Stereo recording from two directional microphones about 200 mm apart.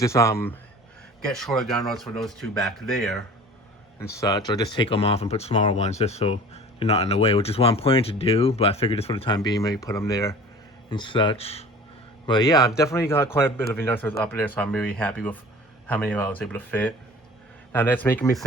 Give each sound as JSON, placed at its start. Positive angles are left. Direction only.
{"t": 0.0, "sound": "a man's voice", "side_deg": 15}
{"t": 1.2, "sound": "speech", "side_deg": 0}
{"t": 4.0, "sound": "a man's voice", "side_deg": 15}